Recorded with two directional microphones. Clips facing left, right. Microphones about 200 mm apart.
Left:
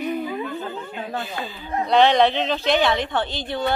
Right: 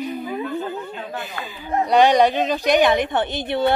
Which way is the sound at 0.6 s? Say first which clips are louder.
Right 2 dB; 15° right (ahead or behind).